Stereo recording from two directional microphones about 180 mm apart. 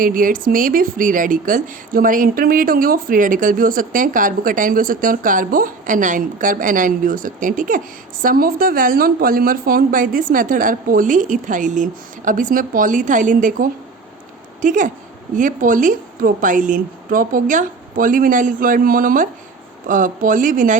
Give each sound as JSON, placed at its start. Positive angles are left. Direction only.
{"t": 0.0, "sound": "speech", "side_deg": -50}